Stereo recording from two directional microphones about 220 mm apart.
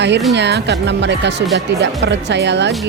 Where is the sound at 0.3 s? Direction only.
50° right (ahead or behind).